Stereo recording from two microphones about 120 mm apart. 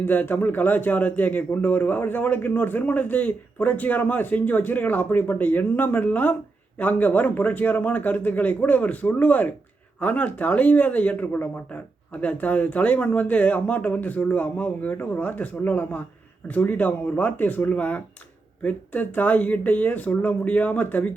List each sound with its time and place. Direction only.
0.0 s a man's voice: 15° left (ahead or behind)